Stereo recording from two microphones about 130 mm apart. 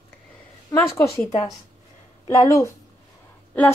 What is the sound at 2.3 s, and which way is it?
Speech, 25° left (ahead or behind).